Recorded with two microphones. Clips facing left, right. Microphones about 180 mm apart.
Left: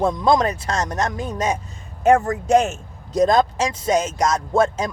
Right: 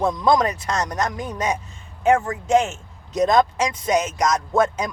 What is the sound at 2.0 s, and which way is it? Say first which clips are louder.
Speech: left 3 dB; 40° left (ahead or behind).